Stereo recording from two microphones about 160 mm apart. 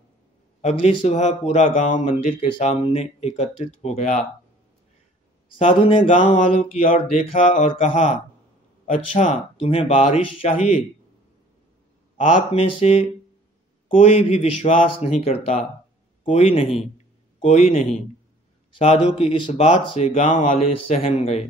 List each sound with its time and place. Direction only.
0.6 s speech: 40° left (ahead or behind)
5.6 s speech: 35° left (ahead or behind)
12.5 s speech: 40° left (ahead or behind)